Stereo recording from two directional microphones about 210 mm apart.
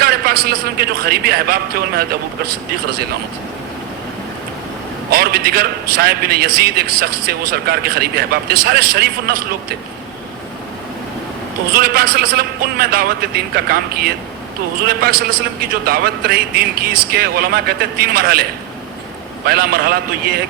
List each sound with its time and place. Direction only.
0.0 s a man's voice: 45° right (ahead or behind)
5.1 s a man's voice: 45° right (ahead or behind)
11.8 s a man's voice: 45° right (ahead or behind)
19.5 s a man's voice: 45° right (ahead or behind)